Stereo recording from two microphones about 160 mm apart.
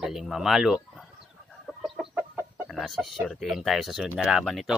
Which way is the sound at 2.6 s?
Centre (ahead or behind).